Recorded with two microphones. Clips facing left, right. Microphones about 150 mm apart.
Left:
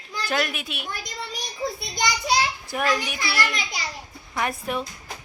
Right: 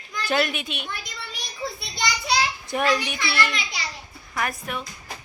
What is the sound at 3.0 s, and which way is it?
Speech, 45° left (ahead or behind).